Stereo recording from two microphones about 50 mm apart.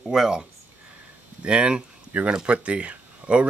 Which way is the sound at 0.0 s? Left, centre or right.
Centre.